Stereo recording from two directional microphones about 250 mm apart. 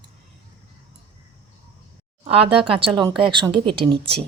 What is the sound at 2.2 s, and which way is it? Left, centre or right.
Speech, right.